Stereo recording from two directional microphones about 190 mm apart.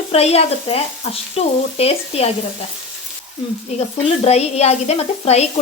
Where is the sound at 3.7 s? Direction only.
35° left (ahead or behind).